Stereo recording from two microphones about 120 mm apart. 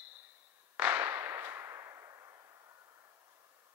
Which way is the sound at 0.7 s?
15° right (ahead or behind).